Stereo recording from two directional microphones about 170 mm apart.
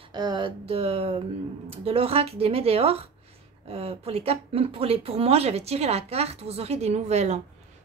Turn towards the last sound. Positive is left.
turn(degrees=-40)  # may be behind; listen again after turning